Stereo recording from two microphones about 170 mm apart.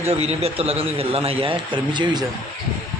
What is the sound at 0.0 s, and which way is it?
A man's voice, 40° right (ahead or behind).